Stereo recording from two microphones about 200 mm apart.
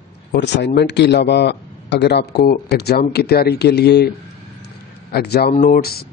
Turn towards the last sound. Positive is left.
turn(degrees=50)  # may be behind; listen again after turning